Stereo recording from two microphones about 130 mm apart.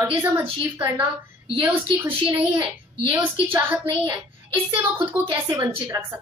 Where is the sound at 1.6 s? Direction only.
10° right (ahead or behind).